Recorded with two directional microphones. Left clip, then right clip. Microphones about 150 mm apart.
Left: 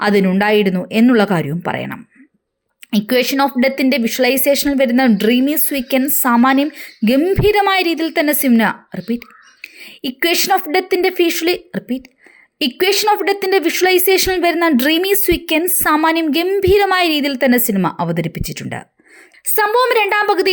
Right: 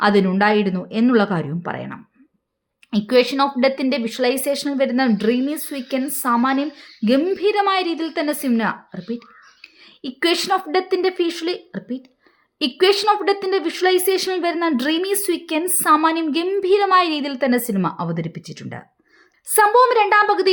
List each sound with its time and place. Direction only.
0.0 s speech: 25° left (ahead or behind)
19.5 s speech: 20° left (ahead or behind)